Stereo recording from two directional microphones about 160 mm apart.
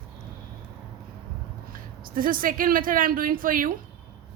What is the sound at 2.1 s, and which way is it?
Speech, 60° right (ahead or behind).